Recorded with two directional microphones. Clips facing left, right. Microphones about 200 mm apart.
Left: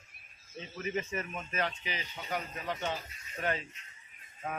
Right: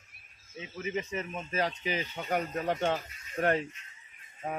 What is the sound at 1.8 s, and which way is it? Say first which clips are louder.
Speech: right 7 dB; 50° right (ahead or behind).